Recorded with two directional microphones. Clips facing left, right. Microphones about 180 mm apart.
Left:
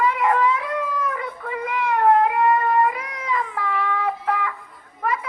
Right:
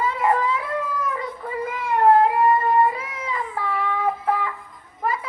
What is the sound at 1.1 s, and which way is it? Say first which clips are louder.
Child singing: right 1 dB; 30° right (ahead or behind).